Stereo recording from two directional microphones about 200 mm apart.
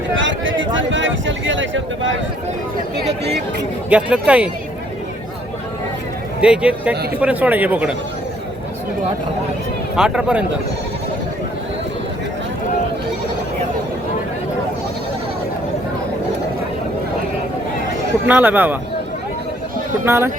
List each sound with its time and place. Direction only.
0.2 s a sound: 70° right (ahead or behind)
3.8 s speech: 5° right (ahead or behind)
6.4 s a man's voice: 5° right (ahead or behind)
9.9 s a man's voice: 5° right (ahead or behind)
18.3 s speech: 10° right (ahead or behind)
20.1 s speech: 10° right (ahead or behind)